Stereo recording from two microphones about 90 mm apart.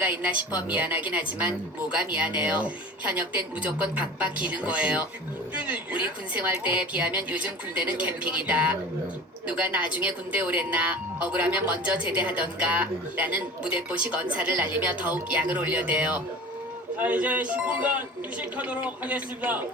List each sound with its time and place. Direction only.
0.0 s speech: 20° right (ahead or behind)